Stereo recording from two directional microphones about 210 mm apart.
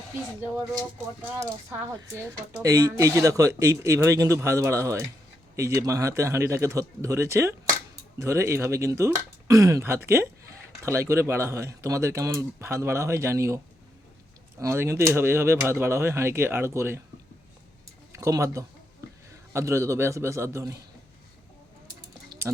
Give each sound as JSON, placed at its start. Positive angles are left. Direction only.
{"t": 0.7, "sound": "speech", "side_deg": -15}
{"t": 14.6, "sound": "speech", "side_deg": -15}
{"t": 18.1, "sound": "speech", "side_deg": -15}